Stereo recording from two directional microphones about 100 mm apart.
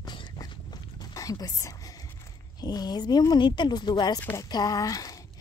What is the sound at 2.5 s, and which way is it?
Speech, 40° left (ahead or behind).